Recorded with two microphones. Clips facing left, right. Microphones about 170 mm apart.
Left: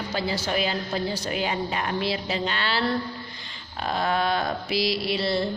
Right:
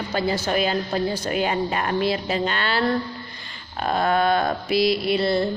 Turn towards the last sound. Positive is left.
turn(degrees=-50)  # may be behind; listen again after turning